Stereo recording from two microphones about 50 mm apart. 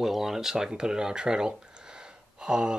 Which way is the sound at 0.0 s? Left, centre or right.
Centre.